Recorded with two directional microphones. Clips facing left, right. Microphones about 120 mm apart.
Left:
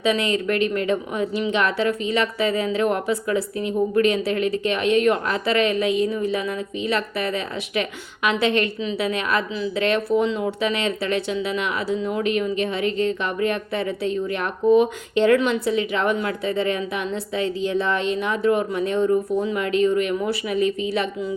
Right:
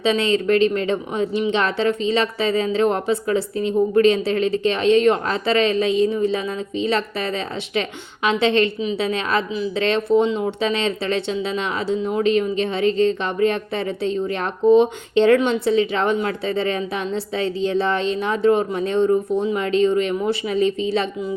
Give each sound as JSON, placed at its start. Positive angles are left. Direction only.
{"t": 0.0, "sound": "speech", "side_deg": -30}